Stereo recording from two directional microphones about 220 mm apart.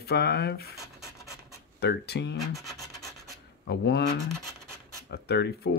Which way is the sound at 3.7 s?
50° left (ahead or behind).